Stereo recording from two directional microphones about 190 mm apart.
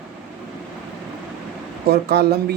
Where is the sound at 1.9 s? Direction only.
55° right (ahead or behind).